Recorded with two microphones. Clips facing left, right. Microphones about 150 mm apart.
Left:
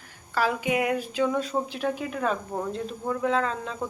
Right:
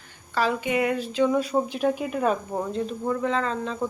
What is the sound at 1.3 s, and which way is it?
Speech, 10° right (ahead or behind).